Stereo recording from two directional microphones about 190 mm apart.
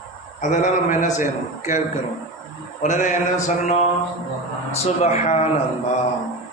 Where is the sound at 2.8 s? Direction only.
40° left (ahead or behind).